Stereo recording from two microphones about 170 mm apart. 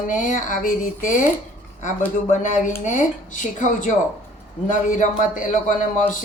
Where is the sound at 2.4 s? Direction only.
45° left (ahead or behind).